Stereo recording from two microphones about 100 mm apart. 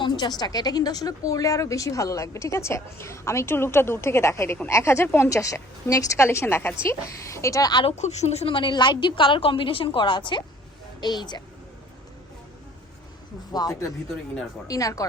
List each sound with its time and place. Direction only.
0.0 s a woman's voice: 45° left (ahead or behind)
7.9 s a woman's voice: 90° left; by 11.4 s 45° left (ahead or behind)
13.5 s a woman's voice: 40° left (ahead or behind)